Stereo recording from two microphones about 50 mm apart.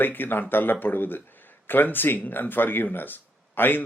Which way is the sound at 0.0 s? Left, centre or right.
Left.